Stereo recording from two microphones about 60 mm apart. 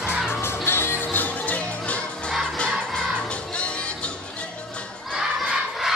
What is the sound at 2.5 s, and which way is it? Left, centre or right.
Music, centre.